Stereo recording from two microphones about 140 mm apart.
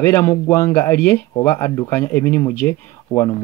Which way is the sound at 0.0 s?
20° left (ahead or behind).